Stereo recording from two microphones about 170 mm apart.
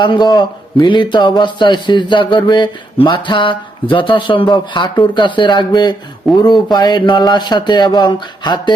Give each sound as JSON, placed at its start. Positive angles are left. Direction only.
{"t": 0.0, "sound": "a man's voice", "side_deg": 25}